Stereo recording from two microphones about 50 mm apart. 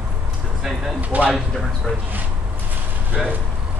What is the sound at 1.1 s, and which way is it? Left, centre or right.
Speech, right.